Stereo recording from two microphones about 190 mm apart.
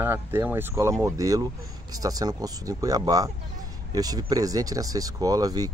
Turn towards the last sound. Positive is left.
turn(degrees=-20)  # may be behind; listen again after turning